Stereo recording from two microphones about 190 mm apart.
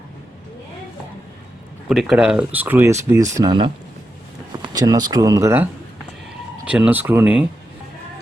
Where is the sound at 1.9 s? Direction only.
Centre (ahead or behind).